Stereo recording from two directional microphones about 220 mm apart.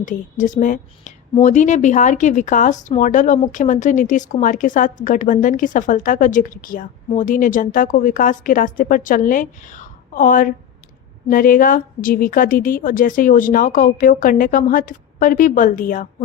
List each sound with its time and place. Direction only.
0.0 s a woman's voice: 35° left (ahead or behind)